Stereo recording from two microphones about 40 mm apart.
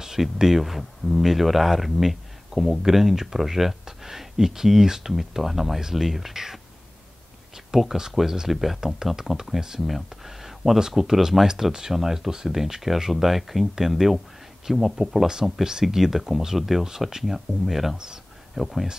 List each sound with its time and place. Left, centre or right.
0.0 s speech: centre
17.9 s speech: centre
18.5 s speech: centre